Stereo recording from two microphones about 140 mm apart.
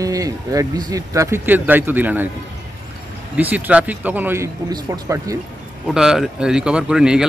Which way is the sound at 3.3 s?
10° right (ahead or behind).